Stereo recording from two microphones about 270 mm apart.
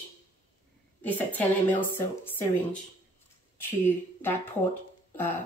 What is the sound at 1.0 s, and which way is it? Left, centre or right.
Speech, centre.